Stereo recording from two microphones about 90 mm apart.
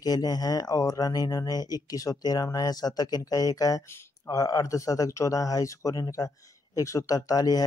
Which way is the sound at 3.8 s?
25° left (ahead or behind).